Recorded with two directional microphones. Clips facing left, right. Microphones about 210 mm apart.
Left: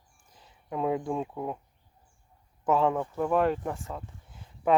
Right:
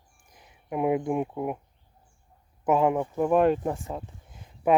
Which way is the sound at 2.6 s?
15° right (ahead or behind).